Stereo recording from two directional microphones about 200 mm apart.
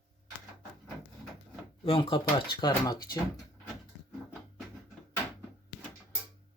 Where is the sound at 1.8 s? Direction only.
25° left (ahead or behind).